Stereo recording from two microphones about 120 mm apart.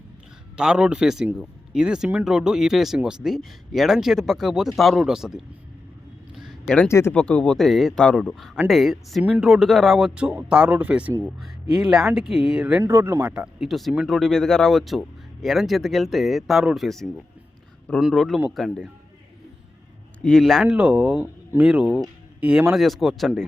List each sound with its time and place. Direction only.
0.5 s speech: 5° right (ahead or behind)
6.3 s a sound: 5° right (ahead or behind)
6.8 s speech: 20° left (ahead or behind)
7.1 s speech: 10° left (ahead or behind); by 12.8 s 10° right (ahead or behind)
12.8 s speech: 20° right (ahead or behind)
13.3 s speech: 5° right (ahead or behind)
20.2 s speech: 5° left (ahead or behind)
20.7 s speech: 10° right (ahead or behind)